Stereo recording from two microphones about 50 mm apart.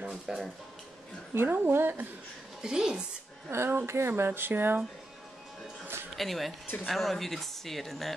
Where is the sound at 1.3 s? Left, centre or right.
Right.